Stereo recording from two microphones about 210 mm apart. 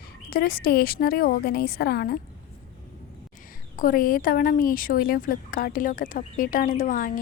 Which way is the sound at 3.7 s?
40° left (ahead or behind).